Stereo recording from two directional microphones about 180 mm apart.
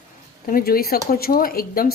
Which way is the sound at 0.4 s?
55° left (ahead or behind).